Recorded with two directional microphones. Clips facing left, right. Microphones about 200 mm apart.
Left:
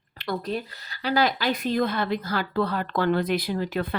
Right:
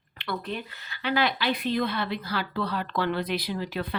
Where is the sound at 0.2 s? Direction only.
40° left (ahead or behind).